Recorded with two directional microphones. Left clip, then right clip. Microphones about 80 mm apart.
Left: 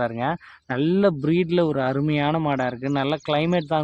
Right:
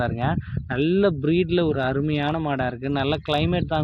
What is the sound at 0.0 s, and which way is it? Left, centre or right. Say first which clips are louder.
Speech: left 1 dB; left.